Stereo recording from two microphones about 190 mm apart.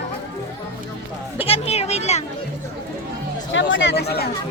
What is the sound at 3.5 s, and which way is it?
Speech, 80° left.